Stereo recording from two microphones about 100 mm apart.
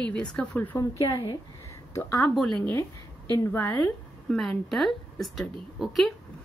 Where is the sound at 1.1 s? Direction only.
45° left (ahead or behind).